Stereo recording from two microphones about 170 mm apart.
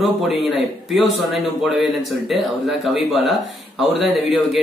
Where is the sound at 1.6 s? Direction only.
Centre (ahead or behind).